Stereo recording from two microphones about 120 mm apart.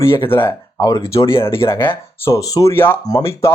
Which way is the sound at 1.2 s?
50° left (ahead or behind).